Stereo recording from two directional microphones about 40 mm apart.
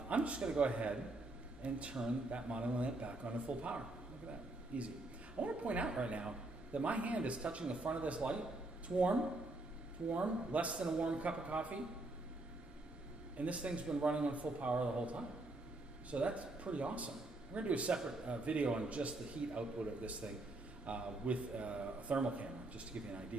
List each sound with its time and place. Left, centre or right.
0.1 s a sound: right
0.4 s a man's voice: right
10.7 s a man's voice: right
13.4 s a man's voice: right